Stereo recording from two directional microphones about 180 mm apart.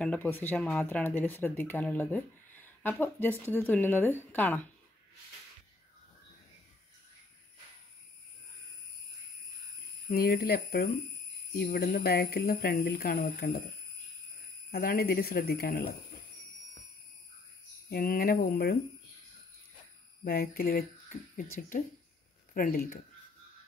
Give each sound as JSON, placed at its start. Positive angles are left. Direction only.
{"t": 0.0, "sound": "speech", "side_deg": 10}
{"t": 10.0, "sound": "speech", "side_deg": 55}
{"t": 14.7, "sound": "speech", "side_deg": 55}
{"t": 17.8, "sound": "speech", "side_deg": 55}
{"t": 20.2, "sound": "speech", "side_deg": 55}